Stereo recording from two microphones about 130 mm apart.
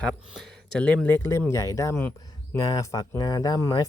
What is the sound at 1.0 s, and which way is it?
Speech, 20° left (ahead or behind).